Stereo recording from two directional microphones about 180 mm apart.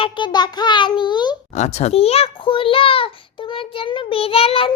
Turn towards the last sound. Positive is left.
turn(degrees=30)  # may be behind; listen again after turning